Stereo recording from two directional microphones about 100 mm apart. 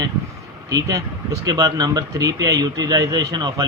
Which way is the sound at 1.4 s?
35° right (ahead or behind).